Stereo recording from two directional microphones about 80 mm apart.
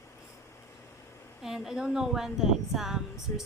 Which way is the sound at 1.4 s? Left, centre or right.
Centre.